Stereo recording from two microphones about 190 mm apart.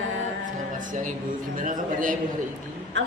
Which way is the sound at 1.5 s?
45° right (ahead or behind).